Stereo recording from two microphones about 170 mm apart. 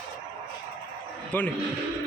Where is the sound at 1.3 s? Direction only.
10° left (ahead or behind).